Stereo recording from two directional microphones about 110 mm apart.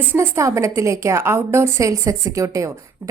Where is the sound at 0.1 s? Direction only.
25° right (ahead or behind).